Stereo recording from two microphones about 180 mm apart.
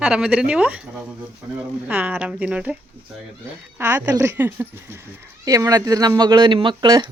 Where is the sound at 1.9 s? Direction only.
5° right (ahead or behind).